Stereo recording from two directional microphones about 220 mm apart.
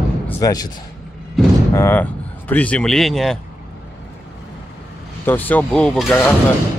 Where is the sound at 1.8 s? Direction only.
10° left (ahead or behind).